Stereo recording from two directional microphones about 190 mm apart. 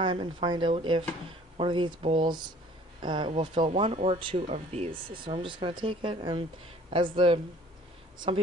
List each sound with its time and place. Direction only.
0.0 s speech: 25° right (ahead or behind)